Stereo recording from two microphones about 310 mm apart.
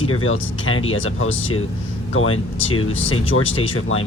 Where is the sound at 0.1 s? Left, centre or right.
Left.